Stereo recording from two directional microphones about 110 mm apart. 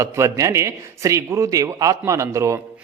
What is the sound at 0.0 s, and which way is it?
A man's voice, 25° right (ahead or behind).